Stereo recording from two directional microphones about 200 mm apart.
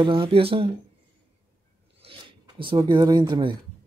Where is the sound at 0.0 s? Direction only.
25° right (ahead or behind).